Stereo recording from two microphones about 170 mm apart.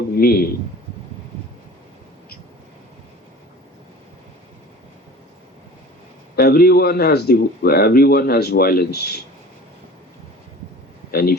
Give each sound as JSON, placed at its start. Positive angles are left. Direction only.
{"t": 0.2, "sound": "a man's voice", "side_deg": 65}
{"t": 6.3, "sound": "a man's voice", "side_deg": 65}
{"t": 11.1, "sound": "speech", "side_deg": 65}